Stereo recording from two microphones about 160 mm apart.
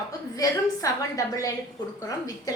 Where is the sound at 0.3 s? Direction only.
20° left (ahead or behind).